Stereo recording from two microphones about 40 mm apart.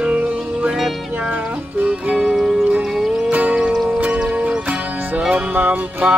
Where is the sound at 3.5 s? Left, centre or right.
Centre.